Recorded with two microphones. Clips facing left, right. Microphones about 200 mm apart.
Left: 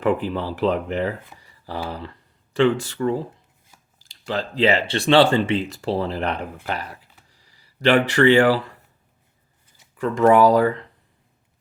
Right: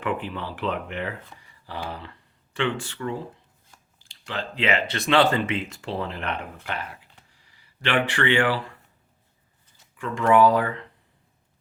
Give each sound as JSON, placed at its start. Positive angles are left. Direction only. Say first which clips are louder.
{"t": 0.0, "sound": "speech", "louder": "left 7 dB", "side_deg": 35}
{"t": 10.0, "sound": "speech", "louder": "left 4 dB", "side_deg": 40}